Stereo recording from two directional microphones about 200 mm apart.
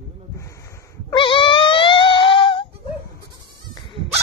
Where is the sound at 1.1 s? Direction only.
25° left (ahead or behind).